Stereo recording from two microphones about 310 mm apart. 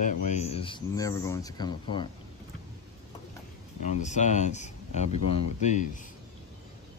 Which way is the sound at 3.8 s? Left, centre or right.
Left.